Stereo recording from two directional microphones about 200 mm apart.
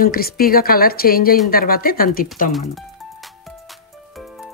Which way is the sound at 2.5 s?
Centre (ahead or behind).